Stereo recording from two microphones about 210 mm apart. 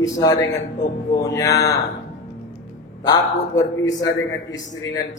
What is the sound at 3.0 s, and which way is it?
A man's voice, 15° left (ahead or behind).